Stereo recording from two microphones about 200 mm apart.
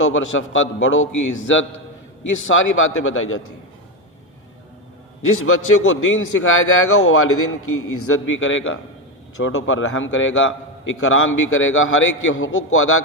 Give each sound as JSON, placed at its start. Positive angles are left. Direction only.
{"t": 0.0, "sound": "a man's voice", "side_deg": 75}
{"t": 2.5, "sound": "a man's voice", "side_deg": 80}
{"t": 5.5, "sound": "a man's voice", "side_deg": 90}
{"t": 9.4, "sound": "a man's voice", "side_deg": 90}